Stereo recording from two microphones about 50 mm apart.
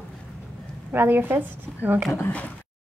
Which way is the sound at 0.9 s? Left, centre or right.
Right.